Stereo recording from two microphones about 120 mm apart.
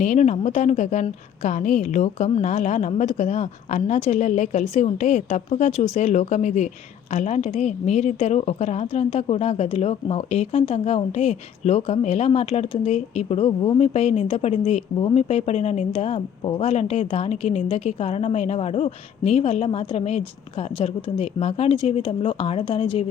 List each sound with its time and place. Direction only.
0.0 s a woman's voice: 75° left (ahead or behind)
1.4 s a woman's voice: 90° left; by 23.0 s 55° left (ahead or behind)